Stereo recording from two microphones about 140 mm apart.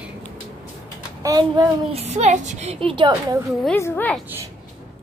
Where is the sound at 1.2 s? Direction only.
25° right (ahead or behind).